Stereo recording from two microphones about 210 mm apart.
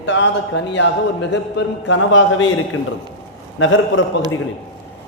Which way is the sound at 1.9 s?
65° left (ahead or behind).